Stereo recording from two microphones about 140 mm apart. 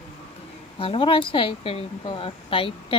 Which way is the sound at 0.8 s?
40° left (ahead or behind).